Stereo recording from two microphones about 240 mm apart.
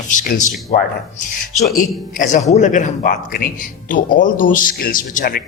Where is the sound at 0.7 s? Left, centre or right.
Left.